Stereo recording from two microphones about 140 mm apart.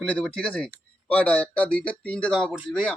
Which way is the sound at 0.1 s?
5° left (ahead or behind).